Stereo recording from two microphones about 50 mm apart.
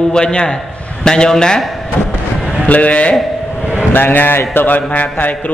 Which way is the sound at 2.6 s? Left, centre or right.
Left.